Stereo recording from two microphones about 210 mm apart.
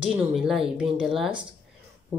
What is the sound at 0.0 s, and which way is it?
Speech, 5° right (ahead or behind).